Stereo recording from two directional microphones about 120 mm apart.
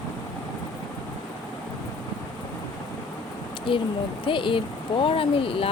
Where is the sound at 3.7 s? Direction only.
45° left (ahead or behind).